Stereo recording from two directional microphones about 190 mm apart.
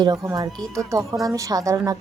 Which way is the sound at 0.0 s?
20° right (ahead or behind).